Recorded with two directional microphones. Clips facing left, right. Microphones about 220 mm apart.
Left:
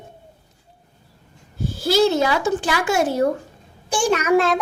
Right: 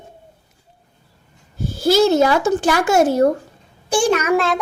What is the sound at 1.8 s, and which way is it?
Speech, 45° right (ahead or behind).